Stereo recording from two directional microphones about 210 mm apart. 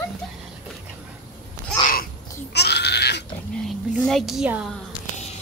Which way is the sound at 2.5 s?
50° left (ahead or behind).